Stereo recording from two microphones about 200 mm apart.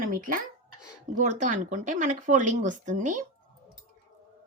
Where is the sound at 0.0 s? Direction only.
45° right (ahead or behind).